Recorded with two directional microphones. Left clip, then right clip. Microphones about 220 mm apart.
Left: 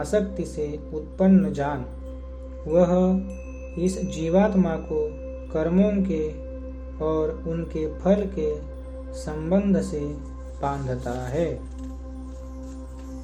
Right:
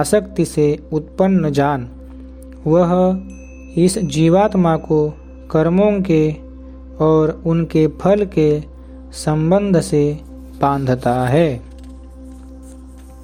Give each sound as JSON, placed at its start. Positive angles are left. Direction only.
{"t": 0.0, "sound": "speech", "side_deg": -50}